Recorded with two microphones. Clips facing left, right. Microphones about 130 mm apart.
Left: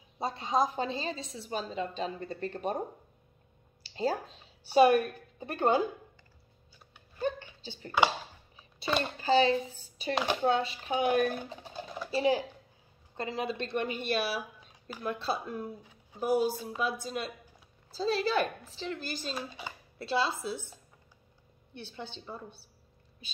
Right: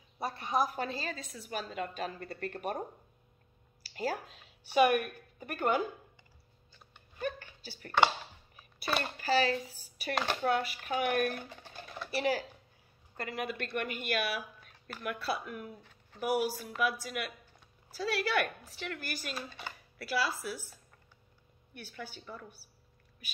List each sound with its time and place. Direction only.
0.2 s a woman's voice: 20° left (ahead or behind)
3.8 s speech: 25° left (ahead or behind)
7.2 s a sound: 25° left (ahead or behind)
9.2 s a woman's voice: 25° left (ahead or behind)
10.1 s speech: 5° left (ahead or behind)
10.4 s a woman's voice: 25° left (ahead or behind)
14.6 s a sound: 15° left (ahead or behind)
15.0 s a woman's voice: 25° left (ahead or behind)
15.8 s a sound: 10° left (ahead or behind)
16.2 s a woman's voice: 25° left (ahead or behind)